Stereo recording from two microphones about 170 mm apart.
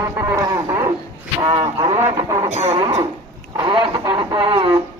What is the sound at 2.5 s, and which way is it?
Music, 40° right (ahead or behind).